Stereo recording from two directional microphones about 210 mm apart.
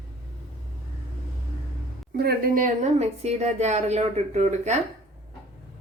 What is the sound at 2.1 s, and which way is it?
A woman's voice, 45° right (ahead or behind).